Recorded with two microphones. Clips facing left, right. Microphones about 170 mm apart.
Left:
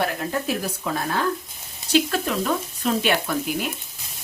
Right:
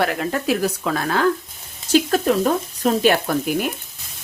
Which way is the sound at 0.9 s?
90° right.